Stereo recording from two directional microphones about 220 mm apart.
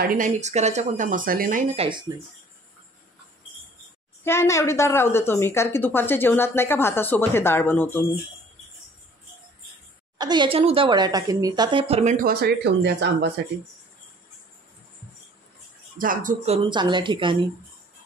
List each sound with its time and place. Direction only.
0.0 s speech: 40° right (ahead or behind)
2.1 s speech: 15° right (ahead or behind)
4.2 s a woman's voice: 10° left (ahead or behind)
10.1 s speech: 20° right (ahead or behind); by 13.3 s 50° right (ahead or behind)
16.0 s speech: 40° right (ahead or behind); by 17.4 s 20° right (ahead or behind)